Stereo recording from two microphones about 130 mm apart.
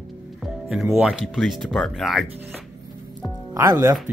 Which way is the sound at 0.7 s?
5° right (ahead or behind).